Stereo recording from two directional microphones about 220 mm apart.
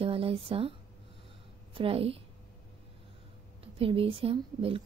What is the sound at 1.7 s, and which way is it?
Speech, 25° right (ahead or behind).